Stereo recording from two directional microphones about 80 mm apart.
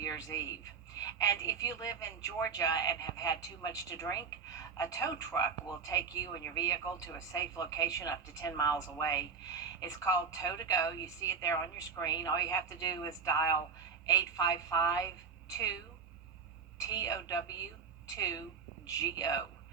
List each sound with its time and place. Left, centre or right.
0.0 s a woman's voice: left
16.7 s a woman's voice: left